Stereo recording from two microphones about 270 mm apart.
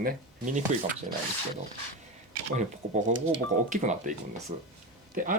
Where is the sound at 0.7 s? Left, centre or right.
Right.